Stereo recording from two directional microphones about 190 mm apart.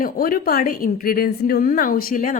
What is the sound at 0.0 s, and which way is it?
A woman's voice, 50° left (ahead or behind).